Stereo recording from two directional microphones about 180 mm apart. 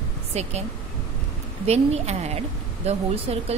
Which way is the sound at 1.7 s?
35° right (ahead or behind).